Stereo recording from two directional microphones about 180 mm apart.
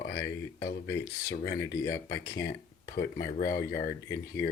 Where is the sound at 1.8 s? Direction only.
15° left (ahead or behind).